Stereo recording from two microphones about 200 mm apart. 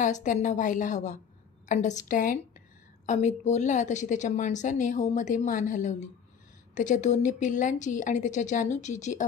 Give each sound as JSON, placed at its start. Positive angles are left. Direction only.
{"t": 0.0, "sound": "a woman's voice", "side_deg": 40}